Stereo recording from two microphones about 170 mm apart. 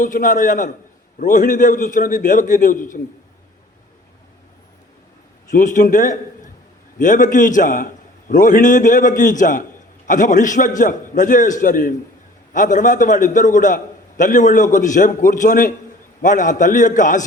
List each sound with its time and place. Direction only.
0.0 s a man's voice: 50° left (ahead or behind)
5.5 s a man's voice: 50° left (ahead or behind)